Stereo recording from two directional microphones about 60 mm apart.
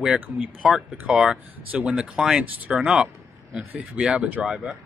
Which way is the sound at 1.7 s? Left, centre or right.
Right.